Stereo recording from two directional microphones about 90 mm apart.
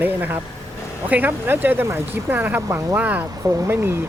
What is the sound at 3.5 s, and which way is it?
Speech, 40° right (ahead or behind).